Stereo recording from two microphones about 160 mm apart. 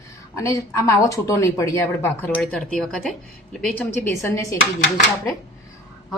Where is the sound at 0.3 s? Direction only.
20° left (ahead or behind).